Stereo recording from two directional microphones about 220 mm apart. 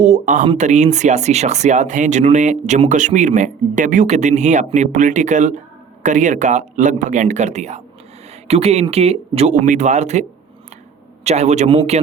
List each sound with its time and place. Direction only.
0.0 s speech: 35° right (ahead or behind)